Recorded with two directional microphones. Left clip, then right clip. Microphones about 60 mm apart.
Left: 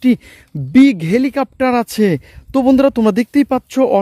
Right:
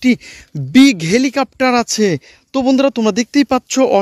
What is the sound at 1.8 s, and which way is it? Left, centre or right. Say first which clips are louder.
Speech: even; left.